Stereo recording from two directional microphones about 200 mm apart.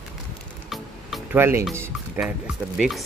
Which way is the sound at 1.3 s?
10° right (ahead or behind).